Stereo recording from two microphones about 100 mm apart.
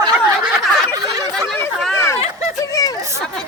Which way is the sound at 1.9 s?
25° left (ahead or behind).